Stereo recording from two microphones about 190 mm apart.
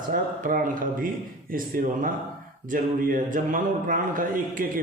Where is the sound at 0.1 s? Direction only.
45° right (ahead or behind).